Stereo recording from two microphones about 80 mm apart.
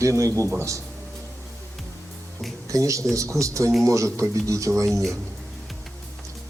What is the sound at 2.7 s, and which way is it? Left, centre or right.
Speech, right.